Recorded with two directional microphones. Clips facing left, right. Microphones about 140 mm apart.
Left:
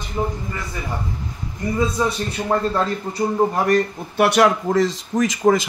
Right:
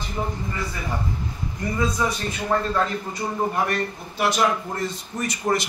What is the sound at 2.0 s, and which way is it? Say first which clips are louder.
Speech: left 3 dB; 30° left (ahead or behind).